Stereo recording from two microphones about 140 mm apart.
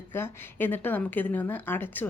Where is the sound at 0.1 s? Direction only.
15° left (ahead or behind).